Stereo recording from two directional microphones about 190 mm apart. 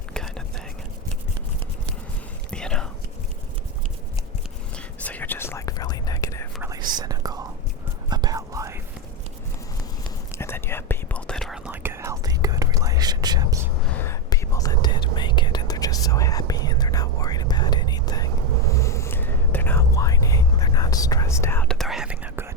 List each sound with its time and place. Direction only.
0.1 s whispering: 5° left (ahead or behind)
2.5 s whispering: 5° left (ahead or behind)
5.0 s whispering: 10° left (ahead or behind)
6.6 s whispering: 20° right (ahead or behind)
10.3 s whispering: 15° left (ahead or behind); by 13.7 s 20° right (ahead or behind)
14.0 s whispering: 15° left (ahead or behind); by 22.4 s 5° right (ahead or behind)